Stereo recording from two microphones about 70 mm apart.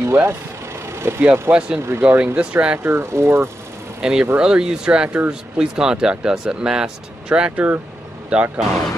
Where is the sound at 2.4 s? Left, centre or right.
Centre.